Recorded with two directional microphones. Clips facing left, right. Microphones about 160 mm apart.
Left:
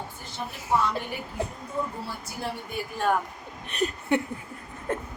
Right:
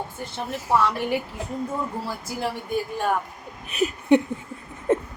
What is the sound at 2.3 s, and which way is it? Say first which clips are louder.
Speech: right 8 dB; 90° right.